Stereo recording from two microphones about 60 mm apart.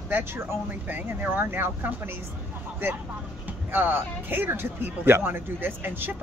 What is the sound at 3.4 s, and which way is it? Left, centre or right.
Speech, right.